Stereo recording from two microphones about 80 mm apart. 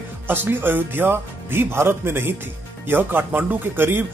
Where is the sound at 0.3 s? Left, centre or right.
Right.